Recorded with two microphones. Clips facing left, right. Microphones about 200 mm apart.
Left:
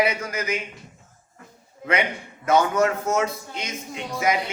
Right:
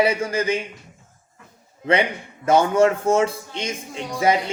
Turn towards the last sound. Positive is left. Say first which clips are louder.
# right 4 dB
turn(degrees=-30)  # may be behind; listen again after turning